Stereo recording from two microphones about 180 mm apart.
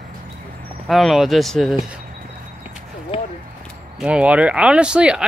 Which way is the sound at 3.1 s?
30° left (ahead or behind).